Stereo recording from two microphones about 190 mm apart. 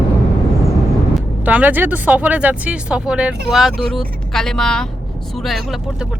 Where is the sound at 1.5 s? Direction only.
10° right (ahead or behind).